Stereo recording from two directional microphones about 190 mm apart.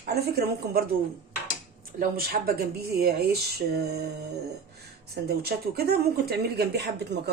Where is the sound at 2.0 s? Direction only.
50° right (ahead or behind).